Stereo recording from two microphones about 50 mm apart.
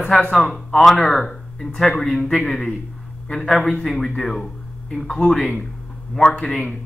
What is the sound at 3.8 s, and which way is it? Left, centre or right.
A man's voice, centre.